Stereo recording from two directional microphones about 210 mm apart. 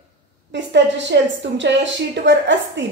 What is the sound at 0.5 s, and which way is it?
A woman's voice, 60° right (ahead or behind).